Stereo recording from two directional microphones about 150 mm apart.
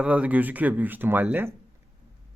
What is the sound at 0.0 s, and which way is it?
Speech, 10° right (ahead or behind).